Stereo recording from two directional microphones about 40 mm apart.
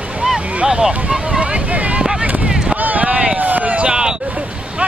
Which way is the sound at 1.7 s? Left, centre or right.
Right.